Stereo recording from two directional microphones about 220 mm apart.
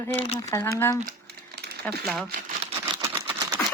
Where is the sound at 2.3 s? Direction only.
35° right (ahead or behind).